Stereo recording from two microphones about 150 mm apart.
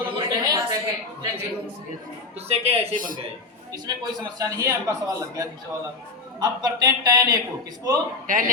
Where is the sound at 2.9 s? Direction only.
65° right (ahead or behind).